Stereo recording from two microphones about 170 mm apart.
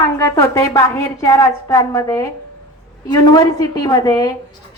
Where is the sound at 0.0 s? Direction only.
20° left (ahead or behind).